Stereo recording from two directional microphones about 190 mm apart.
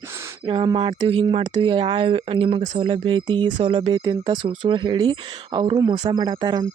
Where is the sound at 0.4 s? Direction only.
25° right (ahead or behind).